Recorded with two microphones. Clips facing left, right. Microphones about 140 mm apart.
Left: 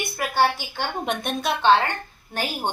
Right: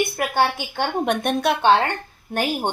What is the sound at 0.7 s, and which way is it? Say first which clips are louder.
A woman's voice: right 5 dB; 55° right (ahead or behind).